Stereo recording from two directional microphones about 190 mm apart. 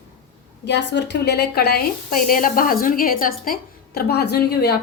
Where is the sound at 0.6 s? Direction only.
65° left (ahead or behind).